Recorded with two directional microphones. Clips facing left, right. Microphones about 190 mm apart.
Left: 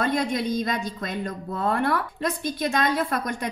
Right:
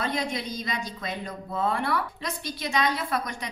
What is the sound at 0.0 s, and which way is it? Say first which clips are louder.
A woman's voice: left 5 dB; 50° left (ahead or behind).